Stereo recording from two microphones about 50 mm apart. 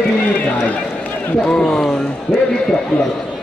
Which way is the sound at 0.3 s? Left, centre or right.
Left.